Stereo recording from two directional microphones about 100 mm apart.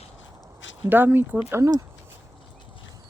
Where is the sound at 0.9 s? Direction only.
20° right (ahead or behind).